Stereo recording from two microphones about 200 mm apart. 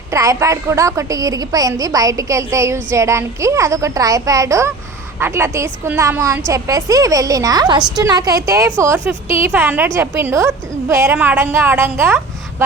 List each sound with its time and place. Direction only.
0.1 s a woman's voice: 15° right (ahead or behind)